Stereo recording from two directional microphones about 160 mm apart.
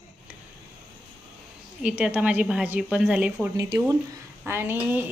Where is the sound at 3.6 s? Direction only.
20° right (ahead or behind).